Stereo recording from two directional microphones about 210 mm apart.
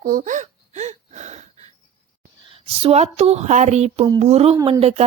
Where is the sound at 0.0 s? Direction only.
40° right (ahead or behind).